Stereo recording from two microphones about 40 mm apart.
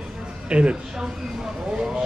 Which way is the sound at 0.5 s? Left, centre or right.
Right.